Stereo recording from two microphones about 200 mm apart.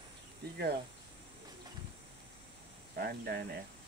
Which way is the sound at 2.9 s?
50° right (ahead or behind).